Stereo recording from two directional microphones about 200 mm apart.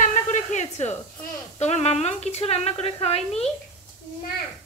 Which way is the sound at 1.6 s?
35° left (ahead or behind).